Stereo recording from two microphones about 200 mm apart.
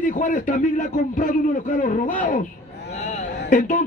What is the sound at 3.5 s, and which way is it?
Speech, 40° left (ahead or behind).